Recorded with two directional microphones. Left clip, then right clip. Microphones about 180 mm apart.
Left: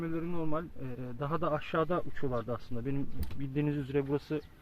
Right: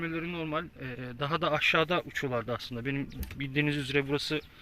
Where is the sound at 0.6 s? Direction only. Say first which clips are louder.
Right 3 dB; 5° right (ahead or behind).